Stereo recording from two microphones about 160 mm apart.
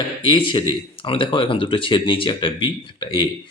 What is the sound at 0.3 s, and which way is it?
A man's voice, 30° left (ahead or behind).